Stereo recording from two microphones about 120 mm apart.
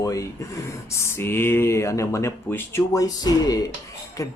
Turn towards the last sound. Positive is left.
turn(degrees=25)  # may be behind; listen again after turning